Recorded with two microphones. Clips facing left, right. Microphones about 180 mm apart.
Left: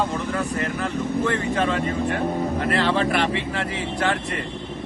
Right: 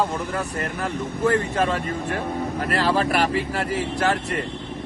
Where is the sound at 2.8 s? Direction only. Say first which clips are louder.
Even; 40° right (ahead or behind).